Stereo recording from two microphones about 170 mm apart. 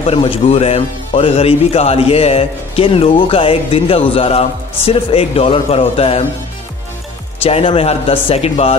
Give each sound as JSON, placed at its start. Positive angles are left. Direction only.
{"t": 0.0, "sound": "a man's voice", "side_deg": 35}
{"t": 7.4, "sound": "a man's voice", "side_deg": 35}